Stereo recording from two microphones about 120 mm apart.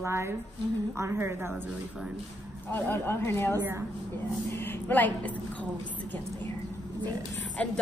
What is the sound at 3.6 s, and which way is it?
Speech, 20° right (ahead or behind).